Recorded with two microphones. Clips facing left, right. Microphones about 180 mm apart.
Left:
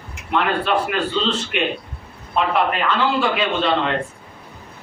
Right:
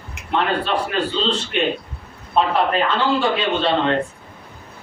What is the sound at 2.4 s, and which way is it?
A man's voice, 35° right (ahead or behind).